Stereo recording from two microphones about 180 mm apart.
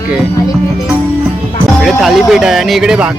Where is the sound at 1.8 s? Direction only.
Centre (ahead or behind).